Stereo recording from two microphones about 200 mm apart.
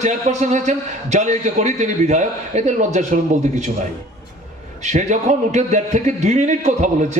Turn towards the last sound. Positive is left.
turn(degrees=-35)  # may be behind; listen again after turning